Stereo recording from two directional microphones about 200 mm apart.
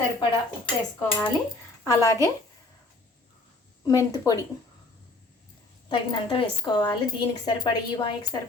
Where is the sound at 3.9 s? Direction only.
15° left (ahead or behind).